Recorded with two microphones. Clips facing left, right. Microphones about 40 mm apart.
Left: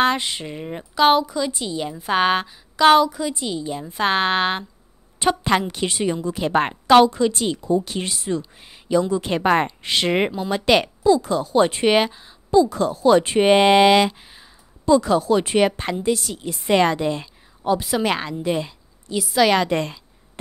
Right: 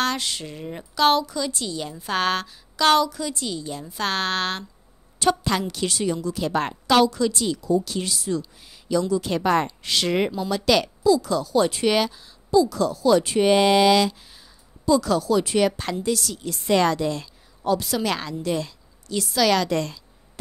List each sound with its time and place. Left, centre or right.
0.0 s a woman's voice: left